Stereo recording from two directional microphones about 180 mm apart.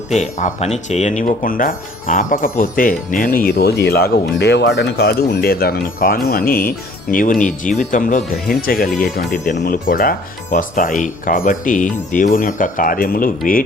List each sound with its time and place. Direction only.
0.1 s speech: 40° left (ahead or behind)